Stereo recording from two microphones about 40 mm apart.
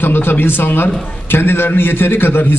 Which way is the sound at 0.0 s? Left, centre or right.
Left.